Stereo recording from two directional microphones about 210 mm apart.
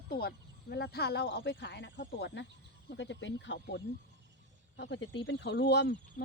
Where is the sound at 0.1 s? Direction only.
45° left (ahead or behind).